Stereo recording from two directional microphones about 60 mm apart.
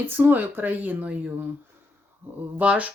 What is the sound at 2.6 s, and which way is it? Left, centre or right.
Speech, right.